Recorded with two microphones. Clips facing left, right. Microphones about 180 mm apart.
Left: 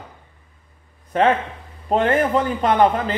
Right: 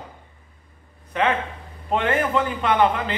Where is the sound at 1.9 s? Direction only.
40° left (ahead or behind).